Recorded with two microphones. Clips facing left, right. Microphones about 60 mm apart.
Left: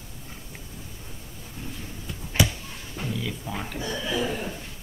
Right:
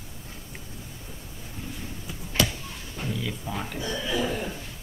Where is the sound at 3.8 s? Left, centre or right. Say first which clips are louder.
Left 1 dB; centre.